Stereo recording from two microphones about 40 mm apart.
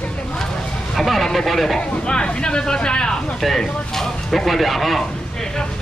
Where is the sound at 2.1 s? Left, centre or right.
Left.